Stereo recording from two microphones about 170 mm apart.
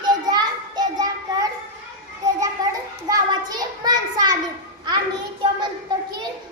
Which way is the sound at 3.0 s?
20° right (ahead or behind).